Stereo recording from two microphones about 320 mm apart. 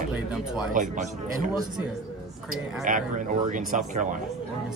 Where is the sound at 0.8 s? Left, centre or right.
Right.